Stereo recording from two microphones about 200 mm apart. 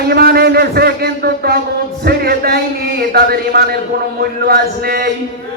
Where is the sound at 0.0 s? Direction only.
50° right (ahead or behind).